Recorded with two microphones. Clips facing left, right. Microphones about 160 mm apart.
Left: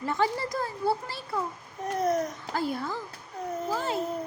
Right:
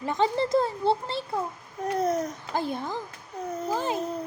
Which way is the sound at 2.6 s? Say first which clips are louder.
Right 1 dB; 20° right (ahead or behind).